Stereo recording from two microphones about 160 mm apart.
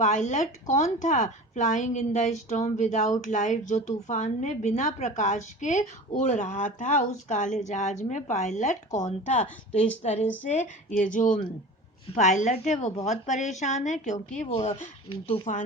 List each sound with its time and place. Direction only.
0.0 s speech: 50° left (ahead or behind)
15.5 s speech: 50° left (ahead or behind)